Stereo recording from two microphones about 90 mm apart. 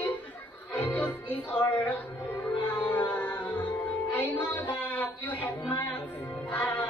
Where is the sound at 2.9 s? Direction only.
20° left (ahead or behind).